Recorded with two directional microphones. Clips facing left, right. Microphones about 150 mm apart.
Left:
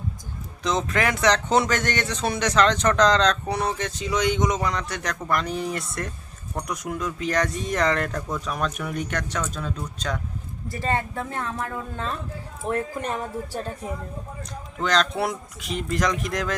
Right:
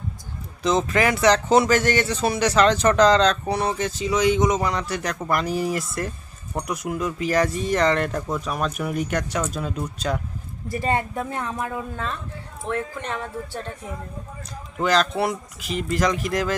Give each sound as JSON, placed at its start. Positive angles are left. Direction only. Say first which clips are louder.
{"t": 0.6, "sound": "speech", "louder": "right 4 dB", "side_deg": -5}
{"t": 12.6, "sound": "speech", "louder": "left 1 dB", "side_deg": 40}
{"t": 14.8, "sound": "speech", "louder": "right 2 dB", "side_deg": -5}